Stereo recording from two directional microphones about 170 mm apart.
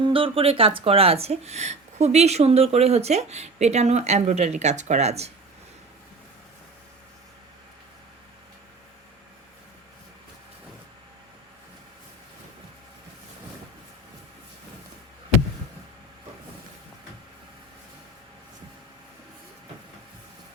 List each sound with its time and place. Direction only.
0.0 s speech: 30° right (ahead or behind)